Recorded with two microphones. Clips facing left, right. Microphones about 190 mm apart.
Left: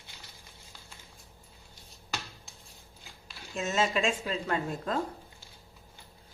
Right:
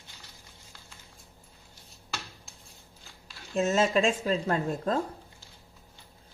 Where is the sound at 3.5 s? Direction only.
45° right (ahead or behind).